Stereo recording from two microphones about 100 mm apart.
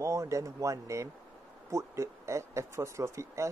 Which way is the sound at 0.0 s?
30° right (ahead or behind).